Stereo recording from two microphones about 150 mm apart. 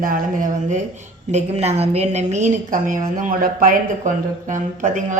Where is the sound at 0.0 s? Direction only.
65° right (ahead or behind).